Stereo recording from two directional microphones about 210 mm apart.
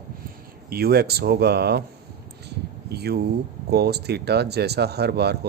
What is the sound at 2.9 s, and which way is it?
Speech, 50° right (ahead or behind).